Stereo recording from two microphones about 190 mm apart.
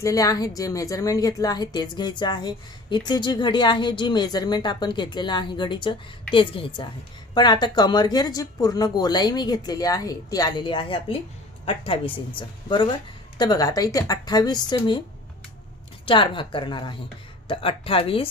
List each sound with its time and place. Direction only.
0.0 s speech: 15° left (ahead or behind)
16.0 s speech: 25° left (ahead or behind)